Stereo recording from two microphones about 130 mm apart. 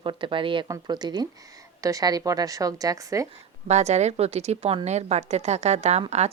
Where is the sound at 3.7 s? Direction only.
60° right (ahead or behind).